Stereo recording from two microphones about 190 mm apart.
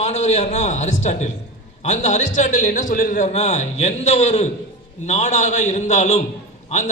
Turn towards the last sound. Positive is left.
turn(degrees=35)  # may be behind; listen again after turning